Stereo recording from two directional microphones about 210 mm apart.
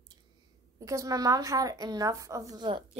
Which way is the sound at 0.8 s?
15° right (ahead or behind).